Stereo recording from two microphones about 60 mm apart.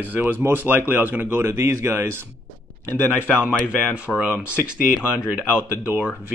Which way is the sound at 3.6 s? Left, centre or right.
Right.